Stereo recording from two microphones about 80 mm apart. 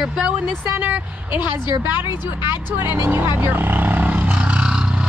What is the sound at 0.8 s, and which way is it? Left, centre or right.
Speech, right.